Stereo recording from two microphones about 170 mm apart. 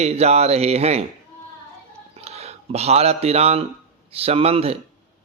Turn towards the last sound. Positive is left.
turn(degrees=-35)  # may be behind; listen again after turning